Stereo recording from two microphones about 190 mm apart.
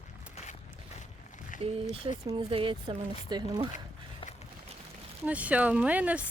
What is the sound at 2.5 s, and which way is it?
Speech, 25° right (ahead or behind).